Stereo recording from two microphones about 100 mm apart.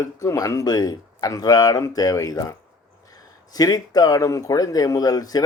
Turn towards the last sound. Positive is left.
turn(degrees=40)  # may be behind; listen again after turning